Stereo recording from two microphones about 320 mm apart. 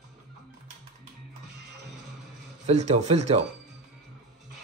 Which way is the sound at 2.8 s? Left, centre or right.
Right.